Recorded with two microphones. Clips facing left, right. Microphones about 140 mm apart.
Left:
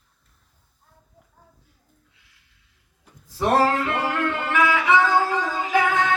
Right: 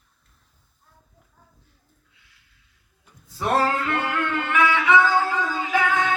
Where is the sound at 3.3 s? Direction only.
30° left (ahead or behind).